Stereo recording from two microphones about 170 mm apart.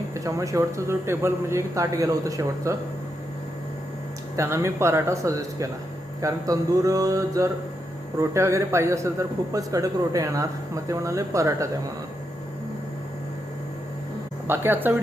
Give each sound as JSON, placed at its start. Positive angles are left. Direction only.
{"t": 0.1, "sound": "a man's voice", "side_deg": -20}
{"t": 4.4, "sound": "a man's voice", "side_deg": -15}
{"t": 6.2, "sound": "mantra", "side_deg": -20}
{"t": 8.2, "sound": "a man's voice", "side_deg": -15}
{"t": 14.4, "sound": "a man's voice", "side_deg": -10}